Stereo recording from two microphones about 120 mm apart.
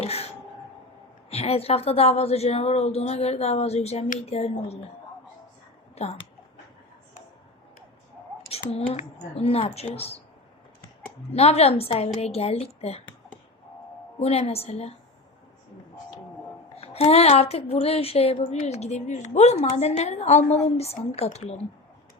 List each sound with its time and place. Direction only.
0.0 s a sound: 60° left (ahead or behind)
1.3 s a woman's voice: 60° left (ahead or behind)
5.9 s speech: 60° left (ahead or behind)
8.7 s a woman's voice: 60° left (ahead or behind)
11.3 s a woman's voice: 60° left (ahead or behind)
14.2 s a woman's voice: 60° left (ahead or behind)
16.7 s a woman's voice: 60° left (ahead or behind)